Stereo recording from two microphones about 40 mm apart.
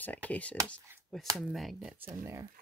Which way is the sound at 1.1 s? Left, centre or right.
Centre.